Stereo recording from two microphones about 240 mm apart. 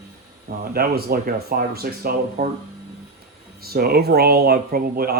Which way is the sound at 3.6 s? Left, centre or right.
Right.